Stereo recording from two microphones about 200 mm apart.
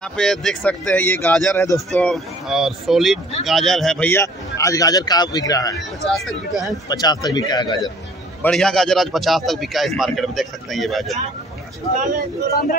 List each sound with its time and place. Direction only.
0.2 s a man's voice: centre (ahead or behind); by 5.8 s 20° left (ahead or behind)
6.0 s a man's voice: centre (ahead or behind)
6.9 s a man's voice: 20° left (ahead or behind)
8.4 s a man's voice: 5° left (ahead or behind)